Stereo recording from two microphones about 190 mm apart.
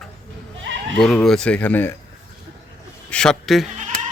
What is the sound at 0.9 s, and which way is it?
Speech, centre (ahead or behind).